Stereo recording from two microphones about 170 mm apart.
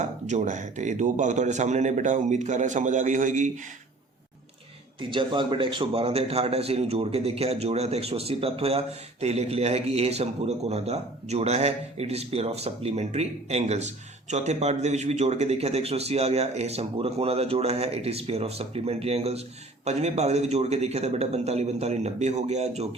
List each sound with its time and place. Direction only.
0.0 s a man's voice: 45° right (ahead or behind)
4.9 s a man's voice: 30° right (ahead or behind)